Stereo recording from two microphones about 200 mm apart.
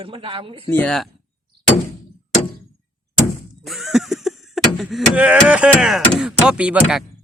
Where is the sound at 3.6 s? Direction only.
Centre (ahead or behind).